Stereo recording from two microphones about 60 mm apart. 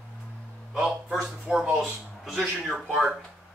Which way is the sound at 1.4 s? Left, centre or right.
Centre.